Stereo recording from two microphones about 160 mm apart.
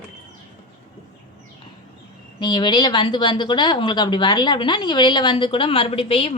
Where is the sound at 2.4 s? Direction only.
25° left (ahead or behind).